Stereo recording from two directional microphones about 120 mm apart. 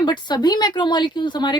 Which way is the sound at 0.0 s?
35° left (ahead or behind).